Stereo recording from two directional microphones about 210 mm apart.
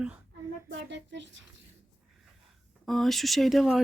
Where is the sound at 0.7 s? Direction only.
55° right (ahead or behind).